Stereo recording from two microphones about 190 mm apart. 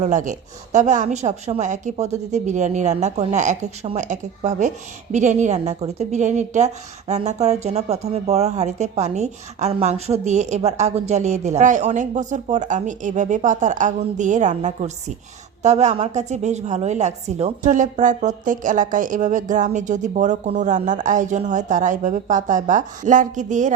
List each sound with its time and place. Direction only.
0.0 s a woman's voice: 40° right (ahead or behind)